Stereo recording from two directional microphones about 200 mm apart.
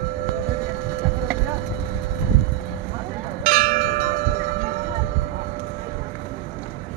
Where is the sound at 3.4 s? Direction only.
40° right (ahead or behind).